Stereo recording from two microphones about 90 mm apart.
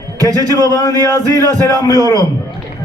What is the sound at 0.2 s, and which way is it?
A man's voice, 40° right (ahead or behind).